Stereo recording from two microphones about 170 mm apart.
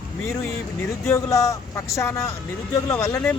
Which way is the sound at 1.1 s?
20° left (ahead or behind).